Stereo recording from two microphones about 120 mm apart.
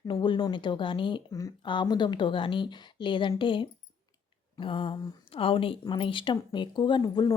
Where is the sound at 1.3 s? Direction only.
30° left (ahead or behind).